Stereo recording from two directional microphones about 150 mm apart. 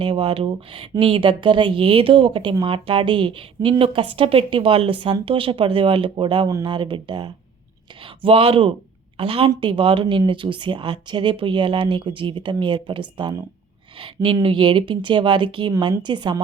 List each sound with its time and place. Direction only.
0.0 s a woman's voice: 35° right (ahead or behind)